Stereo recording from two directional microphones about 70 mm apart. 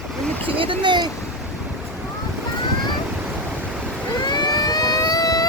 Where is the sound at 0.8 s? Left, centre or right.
Right.